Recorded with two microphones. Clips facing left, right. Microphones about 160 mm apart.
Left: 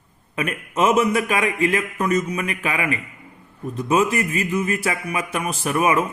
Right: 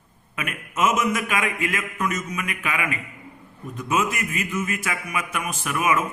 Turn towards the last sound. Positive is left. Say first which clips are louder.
# left 4 dB
turn(degrees=35)  # may be behind; listen again after turning